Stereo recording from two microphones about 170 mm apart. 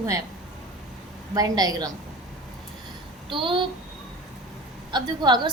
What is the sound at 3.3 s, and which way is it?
Speech, 30° right (ahead or behind).